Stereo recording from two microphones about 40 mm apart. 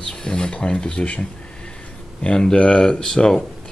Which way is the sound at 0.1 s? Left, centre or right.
Left.